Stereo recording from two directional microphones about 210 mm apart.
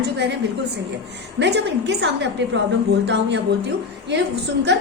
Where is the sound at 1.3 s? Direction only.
55° right (ahead or behind).